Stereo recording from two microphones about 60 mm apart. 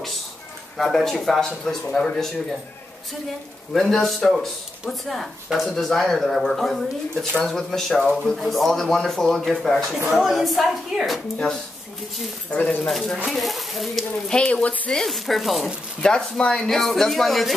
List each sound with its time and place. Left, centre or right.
0.7 s speech: centre
3.7 s speech: centre
12.4 s speech: left
12.8 s speech: centre
14.2 s speech: centre
15.0 s speech: centre
16.0 s speech: centre